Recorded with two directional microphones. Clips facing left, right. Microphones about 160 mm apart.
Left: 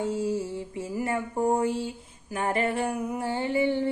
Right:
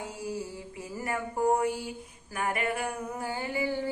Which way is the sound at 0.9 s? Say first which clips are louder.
Left 3 dB; 25° left (ahead or behind).